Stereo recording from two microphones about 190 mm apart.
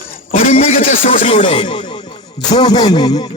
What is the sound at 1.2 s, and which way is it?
Speech, 25° left (ahead or behind).